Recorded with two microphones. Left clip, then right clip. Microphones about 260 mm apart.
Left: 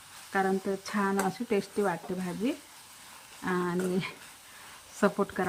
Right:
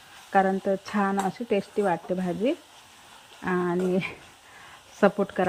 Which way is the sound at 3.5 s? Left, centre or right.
Centre.